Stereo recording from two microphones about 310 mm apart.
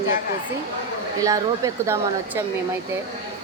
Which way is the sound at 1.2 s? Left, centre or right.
Centre.